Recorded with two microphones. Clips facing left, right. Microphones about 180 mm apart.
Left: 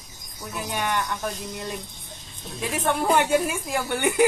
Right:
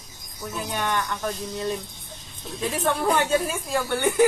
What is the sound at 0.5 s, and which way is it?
Speech, 10° left (ahead or behind).